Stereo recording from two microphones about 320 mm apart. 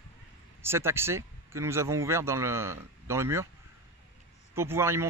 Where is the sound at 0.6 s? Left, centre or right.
Centre.